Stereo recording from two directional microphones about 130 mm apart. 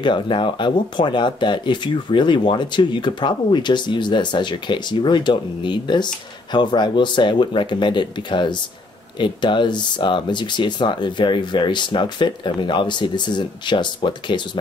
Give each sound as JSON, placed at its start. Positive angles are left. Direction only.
{"t": 0.0, "sound": "speech", "side_deg": 40}